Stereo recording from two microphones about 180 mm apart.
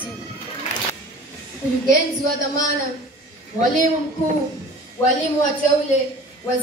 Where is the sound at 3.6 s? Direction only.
45° right (ahead or behind).